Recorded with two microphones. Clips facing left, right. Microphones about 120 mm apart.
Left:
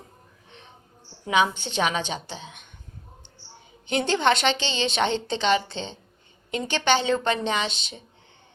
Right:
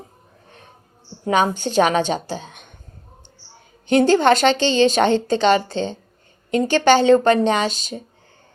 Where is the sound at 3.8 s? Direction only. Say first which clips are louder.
Right 8 dB; 45° right (ahead or behind).